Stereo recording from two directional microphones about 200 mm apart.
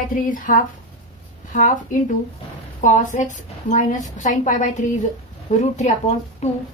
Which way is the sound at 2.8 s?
40° left (ahead or behind).